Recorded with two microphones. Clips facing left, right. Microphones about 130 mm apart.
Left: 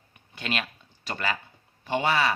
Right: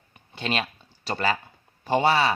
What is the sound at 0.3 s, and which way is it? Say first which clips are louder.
Speech: right 4 dB; 30° right (ahead or behind).